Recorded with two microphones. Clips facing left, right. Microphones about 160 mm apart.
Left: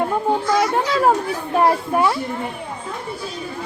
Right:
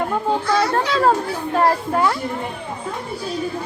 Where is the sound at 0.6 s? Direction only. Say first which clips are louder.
Even; 15° left (ahead or behind).